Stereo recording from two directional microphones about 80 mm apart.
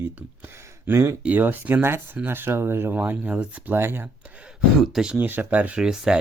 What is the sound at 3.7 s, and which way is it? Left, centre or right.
Speech, right.